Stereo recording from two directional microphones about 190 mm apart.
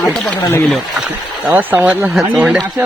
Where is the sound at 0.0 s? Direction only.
5° left (ahead or behind).